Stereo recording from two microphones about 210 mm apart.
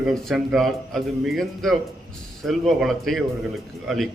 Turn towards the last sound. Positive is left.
turn(degrees=0)  # may be behind; listen again after turning